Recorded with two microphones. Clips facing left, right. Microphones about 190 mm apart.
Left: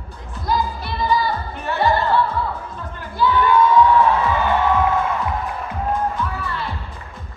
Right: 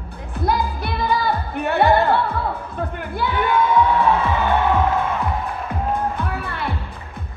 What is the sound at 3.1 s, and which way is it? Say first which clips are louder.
Crowd: left 5 dB; 60° right (ahead or behind).